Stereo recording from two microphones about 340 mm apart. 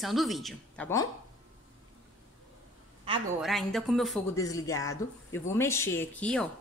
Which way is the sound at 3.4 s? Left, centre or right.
Centre.